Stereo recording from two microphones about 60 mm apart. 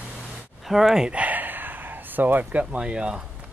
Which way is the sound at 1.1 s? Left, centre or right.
Right.